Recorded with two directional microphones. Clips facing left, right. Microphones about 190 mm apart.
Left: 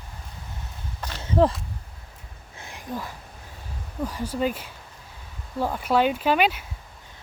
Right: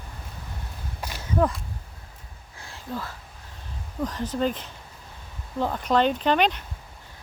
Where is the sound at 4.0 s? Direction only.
10° left (ahead or behind).